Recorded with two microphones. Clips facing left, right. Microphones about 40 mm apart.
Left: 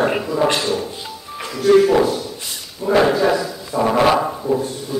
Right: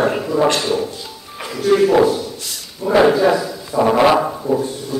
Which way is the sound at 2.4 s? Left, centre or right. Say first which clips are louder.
Even; left.